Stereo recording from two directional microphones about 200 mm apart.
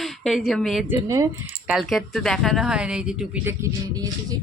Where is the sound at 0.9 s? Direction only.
15° right (ahead or behind).